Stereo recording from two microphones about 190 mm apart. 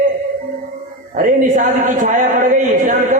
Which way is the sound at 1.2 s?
45° right (ahead or behind).